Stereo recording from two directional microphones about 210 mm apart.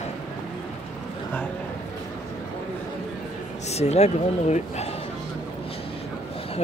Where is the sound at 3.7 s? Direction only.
30° left (ahead or behind).